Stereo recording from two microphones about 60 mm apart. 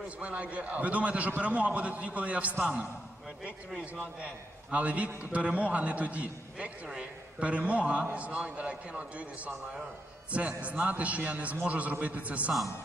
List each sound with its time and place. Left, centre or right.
0.2 s a man's voice: right